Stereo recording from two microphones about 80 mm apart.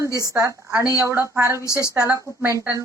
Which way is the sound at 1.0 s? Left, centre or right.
Right.